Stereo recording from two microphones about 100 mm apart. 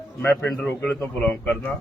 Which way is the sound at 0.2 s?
20° left (ahead or behind).